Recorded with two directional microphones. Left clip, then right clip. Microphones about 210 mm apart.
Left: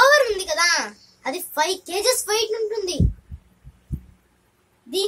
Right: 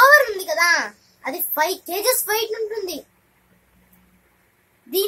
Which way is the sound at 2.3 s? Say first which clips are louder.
Left 1 dB; 10° left (ahead or behind).